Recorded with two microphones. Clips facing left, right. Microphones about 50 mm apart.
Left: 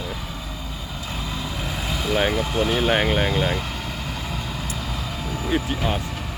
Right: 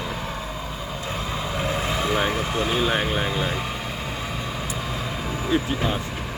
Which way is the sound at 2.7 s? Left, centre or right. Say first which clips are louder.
Left 3 dB; left.